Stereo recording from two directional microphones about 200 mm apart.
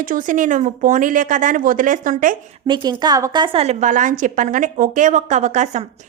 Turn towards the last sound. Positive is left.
turn(degrees=-35)  # may be behind; listen again after turning